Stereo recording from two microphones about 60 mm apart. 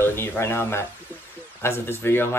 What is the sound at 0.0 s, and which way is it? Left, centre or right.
Speech, left.